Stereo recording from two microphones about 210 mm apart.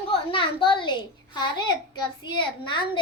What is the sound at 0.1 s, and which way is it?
A child's voice, 25° left (ahead or behind).